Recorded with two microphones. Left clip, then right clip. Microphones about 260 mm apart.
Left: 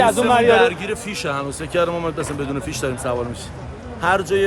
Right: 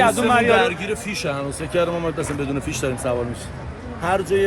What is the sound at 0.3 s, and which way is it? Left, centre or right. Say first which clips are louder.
Speech: left 2 dB; left.